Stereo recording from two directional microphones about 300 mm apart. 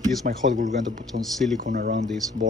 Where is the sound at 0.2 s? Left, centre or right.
Right.